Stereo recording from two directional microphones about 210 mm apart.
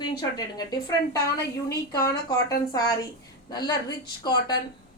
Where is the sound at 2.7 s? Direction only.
15° left (ahead or behind).